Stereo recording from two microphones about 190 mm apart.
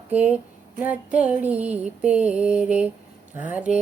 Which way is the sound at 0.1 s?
10° right (ahead or behind).